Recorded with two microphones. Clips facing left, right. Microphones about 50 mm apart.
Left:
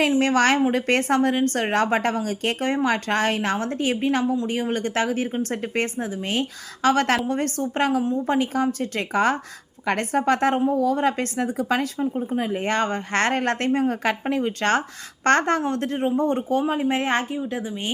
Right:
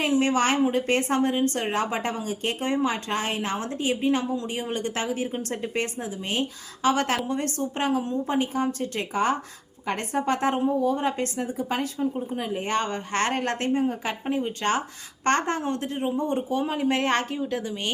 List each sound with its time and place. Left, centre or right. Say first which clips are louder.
0.2 s a woman's voice: left 3 dB; left
1.5 s a woman's voice: left 5 dB; left
12.3 s a woman's voice: left 3 dB; left
13.7 s a woman's voice: left 4 dB; left
16.7 s a woman's voice: left 1 dB; centre